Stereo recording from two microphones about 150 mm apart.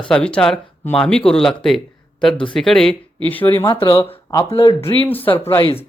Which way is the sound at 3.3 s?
15° left (ahead or behind).